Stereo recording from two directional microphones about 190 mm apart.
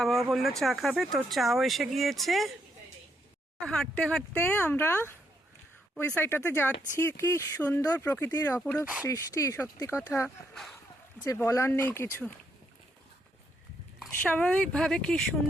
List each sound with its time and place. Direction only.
0.0 s speech: centre (ahead or behind)
3.6 s speech: 5° left (ahead or behind)
8.8 s speech: 5° right (ahead or behind)
9.0 s speech: 15° left (ahead or behind)
10.5 s speech: centre (ahead or behind)
11.2 s speech: 15° left (ahead or behind)
14.1 s speech: 10° left (ahead or behind)